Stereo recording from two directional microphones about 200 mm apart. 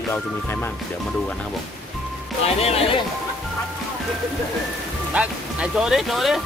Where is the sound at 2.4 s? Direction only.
30° left (ahead or behind).